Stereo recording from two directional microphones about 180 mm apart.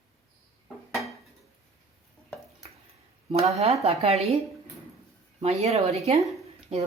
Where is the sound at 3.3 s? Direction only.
35° right (ahead or behind).